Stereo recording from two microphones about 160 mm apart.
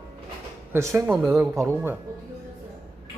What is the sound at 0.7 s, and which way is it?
Speech, 20° right (ahead or behind).